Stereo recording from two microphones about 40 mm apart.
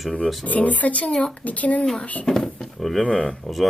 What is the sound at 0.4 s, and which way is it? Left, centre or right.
Speech, left.